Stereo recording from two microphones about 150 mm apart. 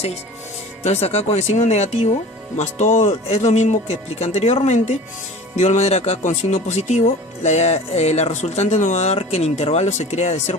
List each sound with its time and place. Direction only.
0.9 s speech: 45° left (ahead or behind)